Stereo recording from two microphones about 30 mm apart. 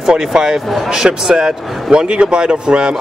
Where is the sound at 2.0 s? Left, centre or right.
Right.